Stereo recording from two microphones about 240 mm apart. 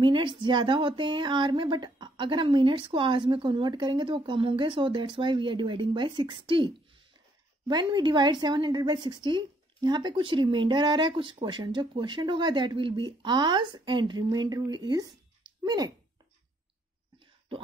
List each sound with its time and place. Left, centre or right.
0.0 s a woman's voice: centre